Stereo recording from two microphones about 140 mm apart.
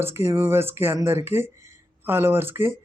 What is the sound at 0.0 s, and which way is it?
Speech, 20° right (ahead or behind).